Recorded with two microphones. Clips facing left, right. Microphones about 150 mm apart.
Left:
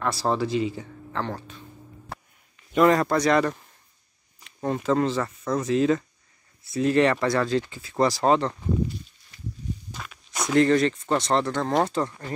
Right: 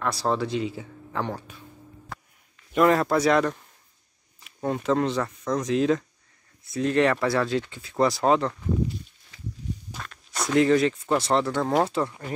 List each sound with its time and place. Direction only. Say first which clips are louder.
0.0 s speech: left 1 dB; centre (ahead or behind)
2.7 s speech: left 1 dB; centre (ahead or behind)
9.9 s walk: even; 5° right (ahead or behind)
10.4 s speech: even; 5° right (ahead or behind)